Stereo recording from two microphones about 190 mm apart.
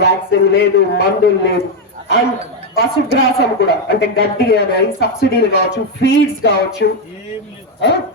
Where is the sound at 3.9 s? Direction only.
60° left (ahead or behind).